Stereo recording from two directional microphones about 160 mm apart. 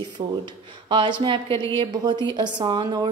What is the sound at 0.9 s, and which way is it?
A woman's voice, 30° right (ahead or behind).